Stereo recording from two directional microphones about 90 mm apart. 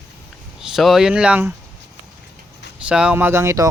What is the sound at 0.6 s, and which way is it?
Speech, 5° right (ahead or behind).